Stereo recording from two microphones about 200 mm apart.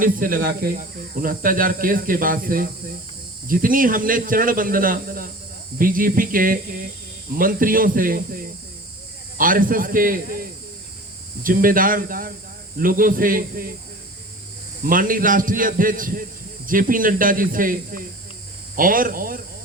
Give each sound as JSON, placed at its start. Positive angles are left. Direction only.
{"t": 0.0, "sound": "speech", "side_deg": -45}
{"t": 11.4, "sound": "speech", "side_deg": -45}
{"t": 14.8, "sound": "speech", "side_deg": -45}